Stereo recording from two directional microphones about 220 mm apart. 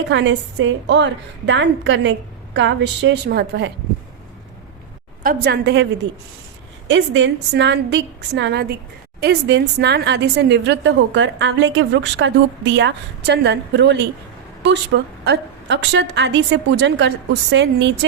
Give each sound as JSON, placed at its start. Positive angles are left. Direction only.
{"t": 0.1, "sound": "a woman's voice", "side_deg": -55}
{"t": 5.2, "sound": "a woman's voice", "side_deg": -40}